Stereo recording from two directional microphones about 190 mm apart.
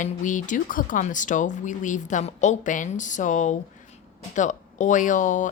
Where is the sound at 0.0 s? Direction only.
40° left (ahead or behind).